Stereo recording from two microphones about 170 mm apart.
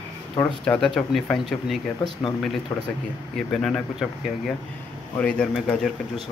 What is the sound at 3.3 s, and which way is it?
Speech, 5° left (ahead or behind).